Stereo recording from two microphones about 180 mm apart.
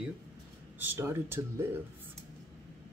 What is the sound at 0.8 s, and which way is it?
Speech, 15° right (ahead or behind).